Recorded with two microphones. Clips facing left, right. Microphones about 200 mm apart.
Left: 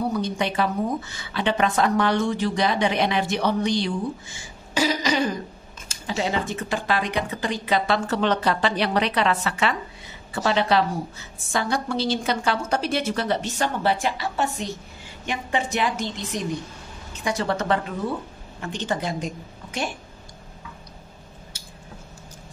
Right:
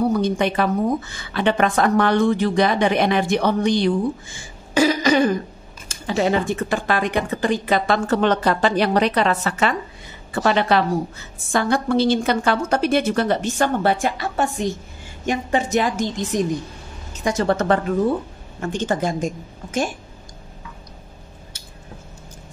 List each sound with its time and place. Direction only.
0.1 s speech: 50° right (ahead or behind)
10.3 s a woman's voice: 55° right (ahead or behind)